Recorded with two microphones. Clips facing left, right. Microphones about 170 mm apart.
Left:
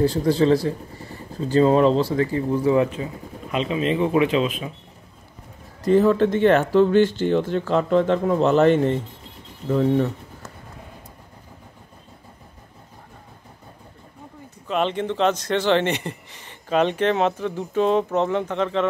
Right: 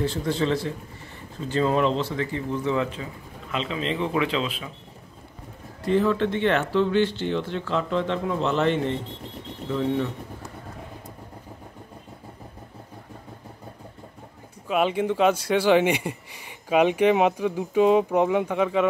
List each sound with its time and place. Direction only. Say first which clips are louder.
0.0 s speech: left 6 dB; 35° left (ahead or behind)
3.5 s speech: left 5 dB; 15° left (ahead or behind)
5.9 s speech: left 5 dB; 40° left (ahead or behind)
14.7 s speech: even; 10° right (ahead or behind)